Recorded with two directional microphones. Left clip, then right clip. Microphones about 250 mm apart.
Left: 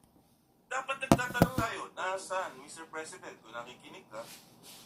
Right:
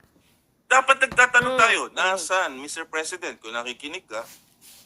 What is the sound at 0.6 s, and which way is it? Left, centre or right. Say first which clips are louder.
Speech: right 18 dB; right.